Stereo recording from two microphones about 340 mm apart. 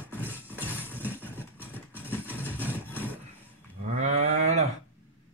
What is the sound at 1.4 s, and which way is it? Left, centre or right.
Vehicle, centre.